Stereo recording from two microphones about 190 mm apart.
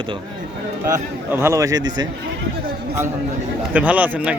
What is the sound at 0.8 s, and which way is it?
A man's voice, 15° right (ahead or behind).